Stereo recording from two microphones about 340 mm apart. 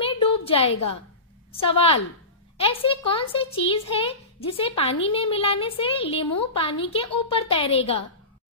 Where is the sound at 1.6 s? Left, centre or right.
Centre.